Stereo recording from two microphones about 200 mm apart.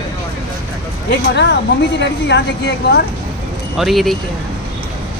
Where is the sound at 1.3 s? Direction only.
60° left (ahead or behind).